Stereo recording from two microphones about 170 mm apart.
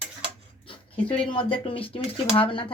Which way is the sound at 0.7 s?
30° left (ahead or behind).